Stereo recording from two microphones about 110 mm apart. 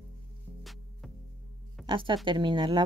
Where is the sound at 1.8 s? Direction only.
50° right (ahead or behind).